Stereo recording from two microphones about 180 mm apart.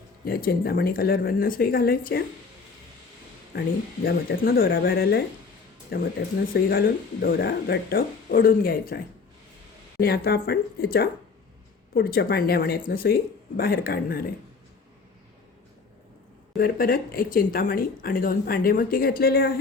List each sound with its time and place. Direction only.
0.3 s speech: 55° left (ahead or behind)
3.5 s speech: 55° left (ahead or behind)
10.0 s speech: 60° left (ahead or behind)
16.6 s speech: 55° left (ahead or behind)